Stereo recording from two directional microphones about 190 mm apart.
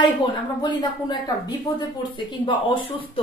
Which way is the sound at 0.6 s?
25° left (ahead or behind).